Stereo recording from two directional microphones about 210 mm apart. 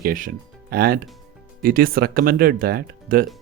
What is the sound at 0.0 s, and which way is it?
Speech, 40° right (ahead or behind).